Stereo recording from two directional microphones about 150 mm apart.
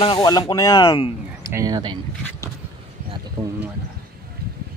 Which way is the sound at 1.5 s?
25° right (ahead or behind).